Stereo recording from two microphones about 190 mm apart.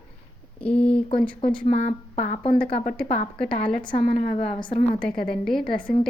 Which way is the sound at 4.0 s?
40° left (ahead or behind).